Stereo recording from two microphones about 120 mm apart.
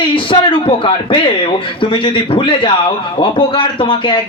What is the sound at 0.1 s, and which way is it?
Speech, 45° left (ahead or behind).